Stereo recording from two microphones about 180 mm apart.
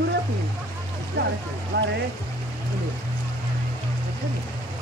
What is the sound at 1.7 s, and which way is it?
Speech, 70° right (ahead or behind).